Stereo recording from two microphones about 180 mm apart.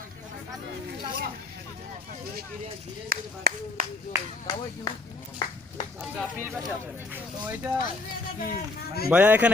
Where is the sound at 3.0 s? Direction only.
55° right (ahead or behind).